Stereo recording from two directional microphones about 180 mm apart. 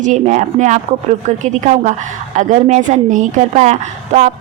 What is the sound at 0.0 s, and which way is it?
A woman's voice, 45° right (ahead or behind).